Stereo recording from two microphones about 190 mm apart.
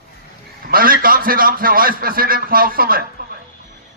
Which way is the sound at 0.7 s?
50° right (ahead or behind).